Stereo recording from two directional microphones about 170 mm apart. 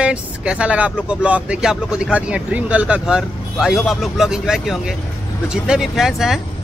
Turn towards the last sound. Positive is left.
turn(degrees=0)  # may be behind; listen again after turning